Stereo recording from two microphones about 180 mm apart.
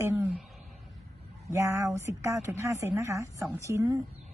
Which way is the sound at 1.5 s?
15° right (ahead or behind).